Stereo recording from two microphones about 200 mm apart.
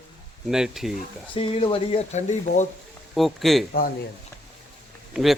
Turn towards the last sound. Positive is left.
turn(degrees=0)  # may be behind; listen again after turning